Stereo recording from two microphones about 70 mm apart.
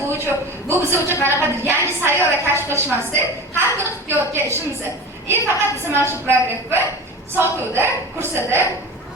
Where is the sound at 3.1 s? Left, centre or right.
Right.